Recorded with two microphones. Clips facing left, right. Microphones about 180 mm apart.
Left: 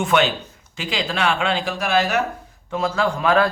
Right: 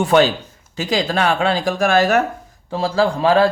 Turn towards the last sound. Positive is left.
turn(degrees=-30)  # may be behind; listen again after turning